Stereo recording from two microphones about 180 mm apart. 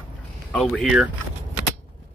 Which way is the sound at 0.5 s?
Centre (ahead or behind).